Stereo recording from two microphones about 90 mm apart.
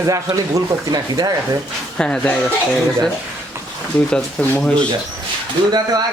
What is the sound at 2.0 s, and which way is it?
Speech, 10° left (ahead or behind).